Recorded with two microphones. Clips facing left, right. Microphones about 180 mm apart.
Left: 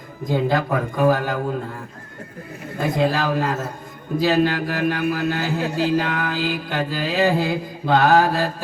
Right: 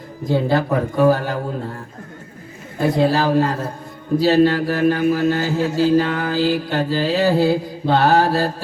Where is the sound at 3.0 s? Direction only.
35° right (ahead or behind).